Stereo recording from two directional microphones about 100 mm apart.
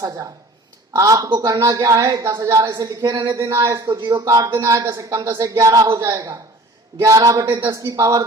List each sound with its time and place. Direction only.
0.9 s a man's voice: 35° right (ahead or behind)